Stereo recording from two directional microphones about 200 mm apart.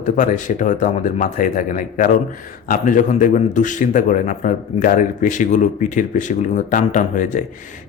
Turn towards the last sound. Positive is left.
turn(degrees=40)  # may be behind; listen again after turning